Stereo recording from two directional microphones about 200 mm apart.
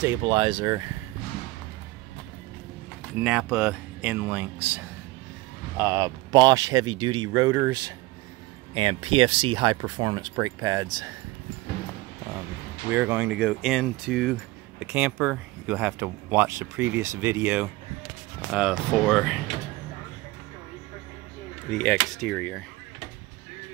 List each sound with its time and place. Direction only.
0.3 s speech: 25° right (ahead or behind)
3.3 s speech: 5° right (ahead or behind)
12.9 s speech: 5° right (ahead or behind)
21.6 s speech: 5° left (ahead or behind)